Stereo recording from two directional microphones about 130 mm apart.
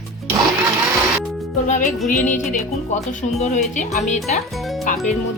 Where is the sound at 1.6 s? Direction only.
80° left.